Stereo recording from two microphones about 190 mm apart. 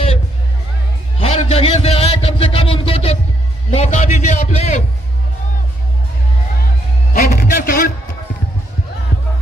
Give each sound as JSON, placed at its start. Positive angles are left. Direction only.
{"t": 1.2, "sound": "a sound", "side_deg": 30}
{"t": 3.7, "sound": "a man's voice", "side_deg": 35}
{"t": 7.2, "sound": "music", "side_deg": 50}